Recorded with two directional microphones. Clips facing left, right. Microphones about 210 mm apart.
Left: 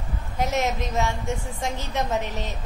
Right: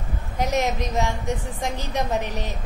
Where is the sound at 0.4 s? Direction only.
15° right (ahead or behind).